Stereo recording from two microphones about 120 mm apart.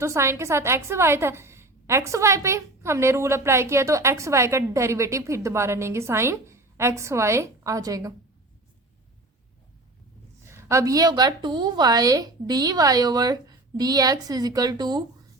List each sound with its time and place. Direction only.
0.0 s a woman's voice: 25° right (ahead or behind)
10.4 s a woman's voice: 25° right (ahead or behind)